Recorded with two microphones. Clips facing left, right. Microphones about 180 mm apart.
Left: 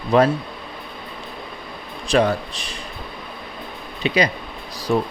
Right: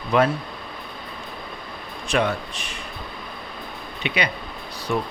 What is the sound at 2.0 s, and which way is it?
Speech, 35° left (ahead or behind).